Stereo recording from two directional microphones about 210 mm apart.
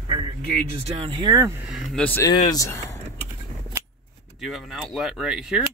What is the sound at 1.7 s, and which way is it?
Speech, 5° left (ahead or behind).